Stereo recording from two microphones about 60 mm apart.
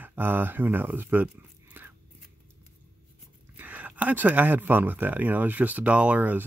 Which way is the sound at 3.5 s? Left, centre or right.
Right.